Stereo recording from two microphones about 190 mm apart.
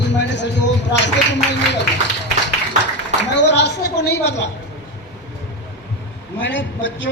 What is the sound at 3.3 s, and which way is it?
Speech, 65° left (ahead or behind).